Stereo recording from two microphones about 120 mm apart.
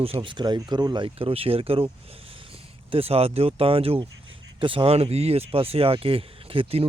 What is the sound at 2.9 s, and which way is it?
Speech, 55° right (ahead or behind).